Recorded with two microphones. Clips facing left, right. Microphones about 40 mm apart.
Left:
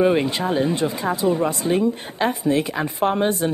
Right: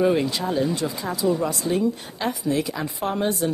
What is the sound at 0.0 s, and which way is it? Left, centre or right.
Speech, left.